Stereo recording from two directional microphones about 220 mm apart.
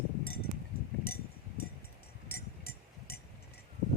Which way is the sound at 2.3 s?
45° left (ahead or behind).